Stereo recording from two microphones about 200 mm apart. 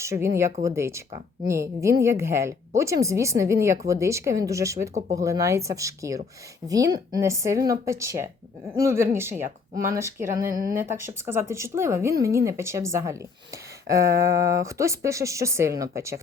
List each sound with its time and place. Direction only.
0.0 s a woman's voice: 15° right (ahead or behind)
10.4 s speech: 45° right (ahead or behind)
10.7 s a woman's voice: 15° right (ahead or behind)